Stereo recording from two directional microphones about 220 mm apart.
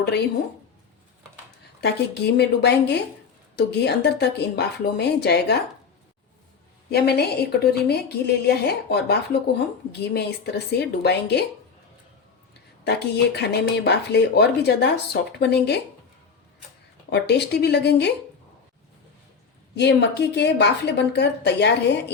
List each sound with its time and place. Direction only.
1.8 s speech: 50° left (ahead or behind)
6.9 s speech: 45° left (ahead or behind)
12.5 s speech: 50° left (ahead or behind)
17.1 s speech: 50° left (ahead or behind)
19.7 s speech: 50° left (ahead or behind)